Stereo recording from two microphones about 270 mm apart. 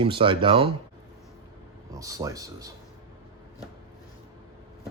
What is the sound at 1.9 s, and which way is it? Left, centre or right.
Speech, centre.